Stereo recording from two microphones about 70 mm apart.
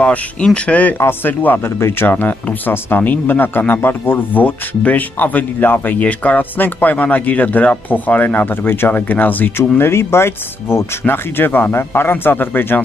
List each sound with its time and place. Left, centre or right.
0.0 s speech: centre
9.6 s speech: left